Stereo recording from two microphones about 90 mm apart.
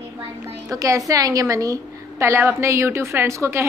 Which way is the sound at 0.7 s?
40° right (ahead or behind).